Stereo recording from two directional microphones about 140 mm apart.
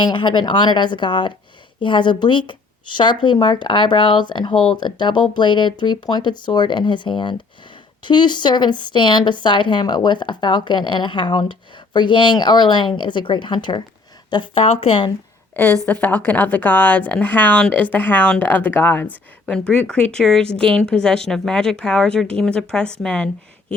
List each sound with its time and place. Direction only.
0.0 s speech: 35° left (ahead or behind)
15.9 s speech: 10° left (ahead or behind)